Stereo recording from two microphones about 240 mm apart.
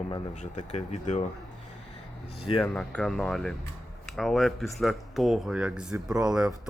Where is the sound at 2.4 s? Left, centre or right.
Left.